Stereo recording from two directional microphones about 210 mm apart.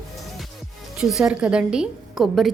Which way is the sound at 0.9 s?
5° right (ahead or behind).